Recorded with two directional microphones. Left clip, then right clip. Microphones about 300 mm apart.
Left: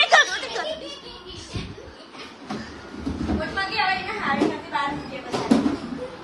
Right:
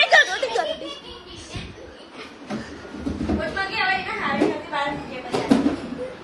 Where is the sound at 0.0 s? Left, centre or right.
Centre.